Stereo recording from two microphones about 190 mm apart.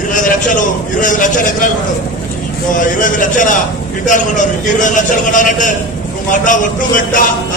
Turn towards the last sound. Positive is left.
turn(degrees=45)  # may be behind; listen again after turning